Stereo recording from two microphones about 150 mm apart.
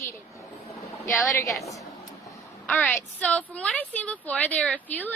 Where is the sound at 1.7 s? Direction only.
20° left (ahead or behind).